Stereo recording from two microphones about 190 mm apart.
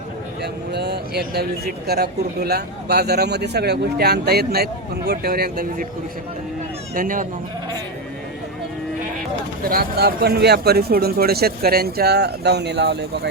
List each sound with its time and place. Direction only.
0.4 s speech: 60° right (ahead or behind)
6.9 s speech: 45° right (ahead or behind)
9.6 s speech: 50° right (ahead or behind)